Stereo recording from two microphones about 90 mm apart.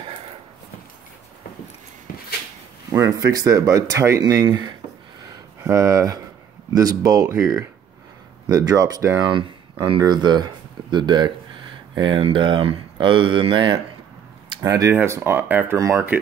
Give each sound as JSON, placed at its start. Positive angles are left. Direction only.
{"t": 2.9, "sound": "speech", "side_deg": -40}
{"t": 4.2, "sound": "speech", "side_deg": -45}
{"t": 8.5, "sound": "speech", "side_deg": -40}
{"t": 9.3, "sound": "speech", "side_deg": -65}
{"t": 12.0, "sound": "speech", "side_deg": -70}
{"t": 14.6, "sound": "speech", "side_deg": -35}
{"t": 15.8, "sound": "speech", "side_deg": -30}